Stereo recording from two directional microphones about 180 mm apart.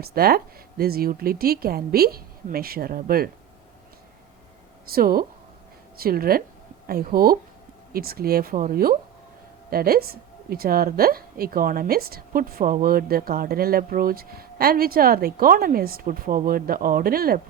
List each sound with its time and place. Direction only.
0.0 s a woman's voice: 60° right (ahead or behind)
4.9 s a woman's voice: 55° right (ahead or behind)